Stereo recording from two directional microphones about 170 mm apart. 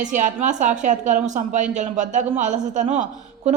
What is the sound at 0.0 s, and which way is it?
A woman's voice, 50° right (ahead or behind).